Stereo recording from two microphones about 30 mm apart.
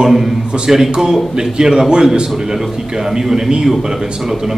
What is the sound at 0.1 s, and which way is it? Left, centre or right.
Speech, centre.